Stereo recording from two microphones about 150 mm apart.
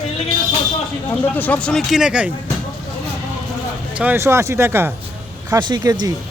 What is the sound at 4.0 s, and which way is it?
Speech, 15° right (ahead or behind).